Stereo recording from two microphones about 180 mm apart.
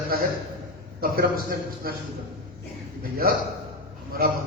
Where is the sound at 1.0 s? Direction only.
55° right (ahead or behind).